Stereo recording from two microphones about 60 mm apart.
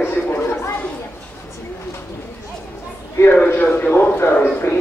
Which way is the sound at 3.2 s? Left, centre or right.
Left.